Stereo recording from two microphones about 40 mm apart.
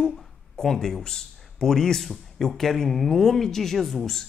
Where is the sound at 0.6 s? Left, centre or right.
Centre.